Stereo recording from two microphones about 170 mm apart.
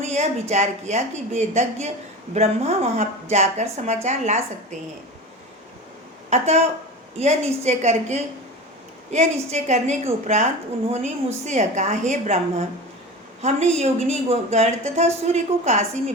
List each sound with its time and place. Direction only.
0.0 s a woman's voice: 40° right (ahead or behind)
6.3 s a woman's voice: 40° right (ahead or behind)